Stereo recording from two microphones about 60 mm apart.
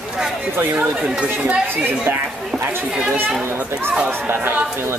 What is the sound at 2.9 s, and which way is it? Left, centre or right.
Speech, centre.